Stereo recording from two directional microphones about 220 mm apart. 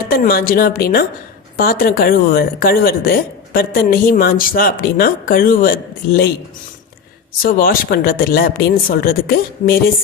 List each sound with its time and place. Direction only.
0.1 s speech: 40° left (ahead or behind)
7.4 s speech: 40° left (ahead or behind)